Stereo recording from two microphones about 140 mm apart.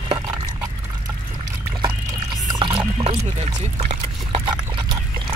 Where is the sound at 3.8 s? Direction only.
40° right (ahead or behind).